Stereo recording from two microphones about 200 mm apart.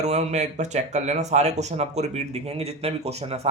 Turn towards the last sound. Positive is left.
turn(degrees=-30)  # may be behind; listen again after turning